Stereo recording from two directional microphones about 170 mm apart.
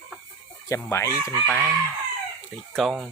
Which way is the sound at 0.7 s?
15° left (ahead or behind).